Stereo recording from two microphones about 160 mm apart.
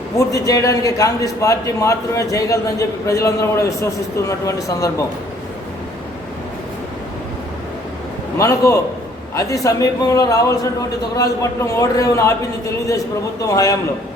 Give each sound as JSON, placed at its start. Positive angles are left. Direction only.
{"t": 0.3, "sound": "a man's voice", "side_deg": 20}
{"t": 8.4, "sound": "a man's voice", "side_deg": 20}
{"t": 13.5, "sound": "a man's voice", "side_deg": 20}